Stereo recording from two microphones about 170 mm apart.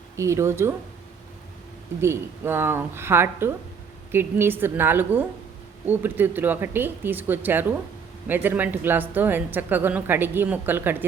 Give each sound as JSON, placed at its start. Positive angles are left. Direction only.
{"t": 0.2, "sound": "speech", "side_deg": -15}
{"t": 2.0, "sound": "speech", "side_deg": -15}